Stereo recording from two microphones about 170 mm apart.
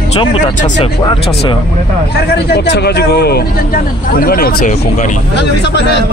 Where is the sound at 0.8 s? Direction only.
30° left (ahead or behind).